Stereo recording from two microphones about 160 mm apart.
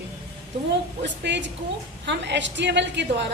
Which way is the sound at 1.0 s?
90° right.